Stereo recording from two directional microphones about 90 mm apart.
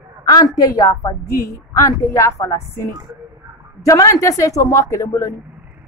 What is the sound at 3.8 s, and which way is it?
A woman's voice, 35° left (ahead or behind).